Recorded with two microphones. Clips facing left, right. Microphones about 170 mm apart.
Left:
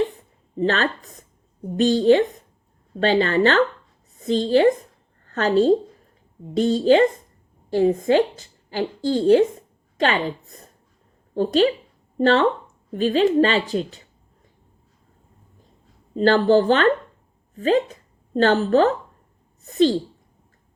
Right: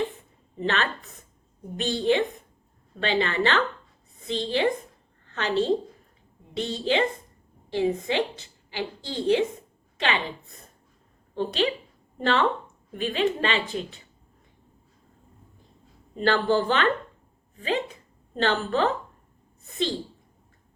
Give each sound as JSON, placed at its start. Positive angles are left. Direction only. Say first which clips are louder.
{"t": 0.1, "sound": "a sound", "louder": "left 8 dB", "side_deg": 35}
{"t": 1.8, "sound": "a woman's voice", "louder": "left 8 dB", "side_deg": 40}
{"t": 16.1, "sound": "a woman's voice", "louder": "left 7 dB", "side_deg": 40}